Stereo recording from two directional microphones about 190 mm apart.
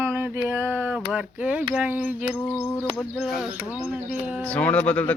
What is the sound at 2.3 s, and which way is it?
Speech, 10° left (ahead or behind).